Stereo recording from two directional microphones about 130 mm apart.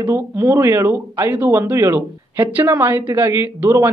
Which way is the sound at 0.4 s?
20° right (ahead or behind).